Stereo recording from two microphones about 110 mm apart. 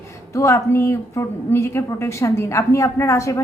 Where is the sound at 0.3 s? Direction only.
25° left (ahead or behind).